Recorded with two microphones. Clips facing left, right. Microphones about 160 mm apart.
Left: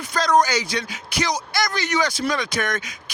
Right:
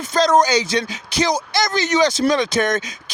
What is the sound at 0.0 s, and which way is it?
Speech, 25° right (ahead or behind).